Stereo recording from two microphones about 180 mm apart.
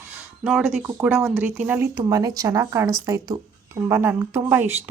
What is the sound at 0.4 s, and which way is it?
Speech, centre (ahead or behind).